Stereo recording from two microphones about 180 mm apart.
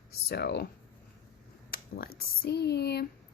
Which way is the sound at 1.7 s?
60° left (ahead or behind).